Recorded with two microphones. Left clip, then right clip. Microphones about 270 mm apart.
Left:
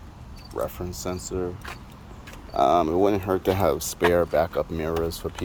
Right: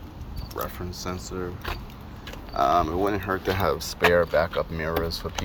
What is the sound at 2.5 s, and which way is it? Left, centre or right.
Speech, left.